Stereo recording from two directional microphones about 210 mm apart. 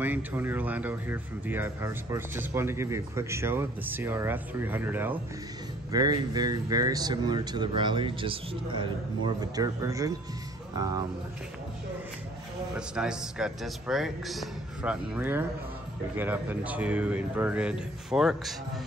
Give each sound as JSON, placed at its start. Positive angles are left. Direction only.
{"t": 0.0, "sound": "a man's voice", "side_deg": -10}
{"t": 12.7, "sound": "a man's voice", "side_deg": -5}